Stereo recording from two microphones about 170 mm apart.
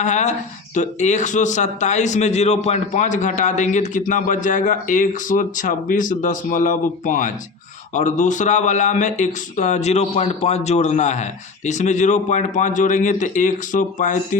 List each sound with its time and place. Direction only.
0.0 s speech: 45° left (ahead or behind)